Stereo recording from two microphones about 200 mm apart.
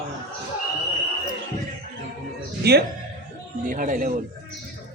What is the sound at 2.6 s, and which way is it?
Speech, 55° right (ahead or behind).